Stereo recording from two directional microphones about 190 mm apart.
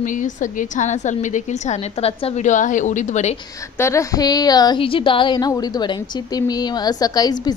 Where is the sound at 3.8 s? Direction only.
15° left (ahead or behind).